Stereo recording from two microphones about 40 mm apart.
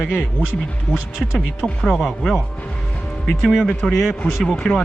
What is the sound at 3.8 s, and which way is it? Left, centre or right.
Speech, left.